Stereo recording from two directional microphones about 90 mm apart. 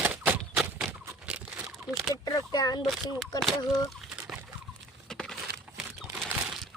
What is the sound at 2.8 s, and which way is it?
Speech, 5° right (ahead or behind).